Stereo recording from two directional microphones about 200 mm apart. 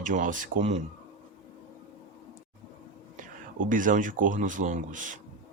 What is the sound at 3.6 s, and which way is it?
Speech, 40° right (ahead or behind).